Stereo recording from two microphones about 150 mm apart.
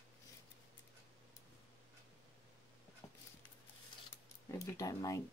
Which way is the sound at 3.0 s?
25° left (ahead or behind).